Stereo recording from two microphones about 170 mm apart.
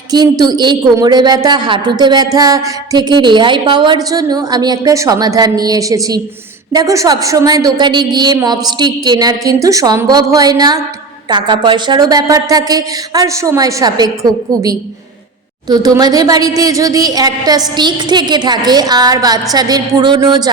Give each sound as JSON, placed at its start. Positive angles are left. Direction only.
{"t": 0.1, "sound": "a woman's voice", "side_deg": -25}